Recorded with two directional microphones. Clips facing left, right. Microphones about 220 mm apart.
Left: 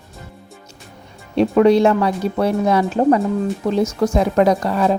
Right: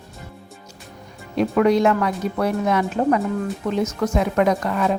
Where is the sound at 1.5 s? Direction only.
30° left (ahead or behind).